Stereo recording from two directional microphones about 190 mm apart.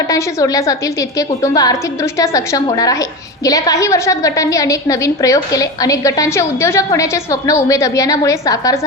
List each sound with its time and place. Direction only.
0.1 s a woman's voice: 20° left (ahead or behind)